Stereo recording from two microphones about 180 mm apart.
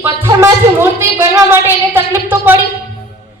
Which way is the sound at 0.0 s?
15° right (ahead or behind).